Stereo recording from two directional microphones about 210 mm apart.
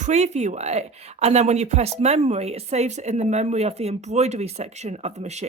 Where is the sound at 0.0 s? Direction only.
30° right (ahead or behind).